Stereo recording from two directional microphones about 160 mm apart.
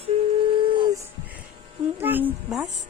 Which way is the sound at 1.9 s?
10° right (ahead or behind).